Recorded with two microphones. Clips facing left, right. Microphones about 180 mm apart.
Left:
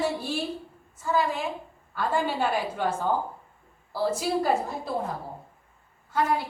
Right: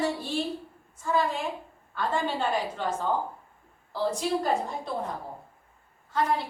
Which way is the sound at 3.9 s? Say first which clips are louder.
Left 1 dB; 5° left (ahead or behind).